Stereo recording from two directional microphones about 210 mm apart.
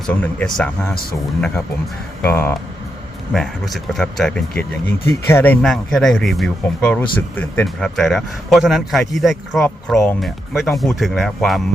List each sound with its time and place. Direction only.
0.1 s speech: 5° left (ahead or behind)